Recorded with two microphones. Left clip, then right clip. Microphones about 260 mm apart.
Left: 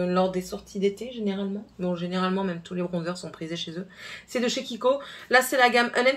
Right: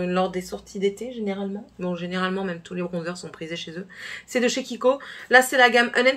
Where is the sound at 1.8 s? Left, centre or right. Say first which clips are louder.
Right 1 dB; centre.